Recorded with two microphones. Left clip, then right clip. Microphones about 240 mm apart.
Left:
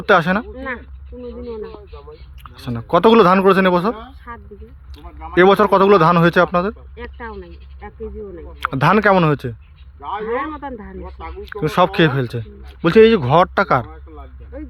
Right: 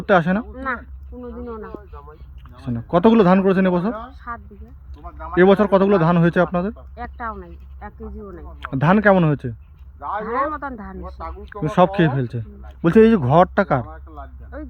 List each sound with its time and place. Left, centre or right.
0.0 s a sound: centre
4.9 s speech: centre
12.9 s speech: centre
13.2 s speech: centre